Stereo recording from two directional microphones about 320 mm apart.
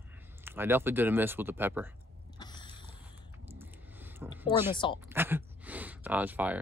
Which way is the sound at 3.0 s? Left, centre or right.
Centre.